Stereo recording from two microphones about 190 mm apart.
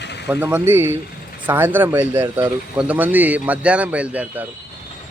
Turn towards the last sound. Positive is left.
turn(degrees=-10)  # may be behind; listen again after turning